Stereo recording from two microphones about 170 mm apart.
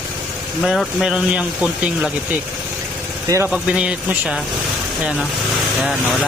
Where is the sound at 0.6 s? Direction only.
Centre (ahead or behind).